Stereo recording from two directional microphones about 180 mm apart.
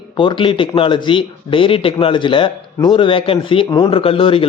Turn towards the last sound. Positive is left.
turn(degrees=30)  # may be behind; listen again after turning